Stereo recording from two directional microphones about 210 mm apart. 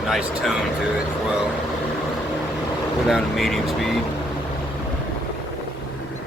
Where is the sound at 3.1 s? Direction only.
Centre (ahead or behind).